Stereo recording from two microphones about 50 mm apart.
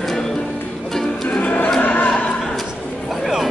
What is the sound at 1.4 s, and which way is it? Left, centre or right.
Neigh, left.